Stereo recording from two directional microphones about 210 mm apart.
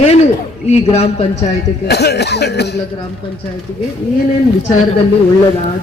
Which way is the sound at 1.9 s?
50° left (ahead or behind).